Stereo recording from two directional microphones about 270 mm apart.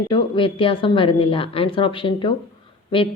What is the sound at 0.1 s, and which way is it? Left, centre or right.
A woman's voice, centre.